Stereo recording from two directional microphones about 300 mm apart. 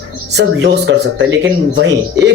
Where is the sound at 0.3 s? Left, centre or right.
Right.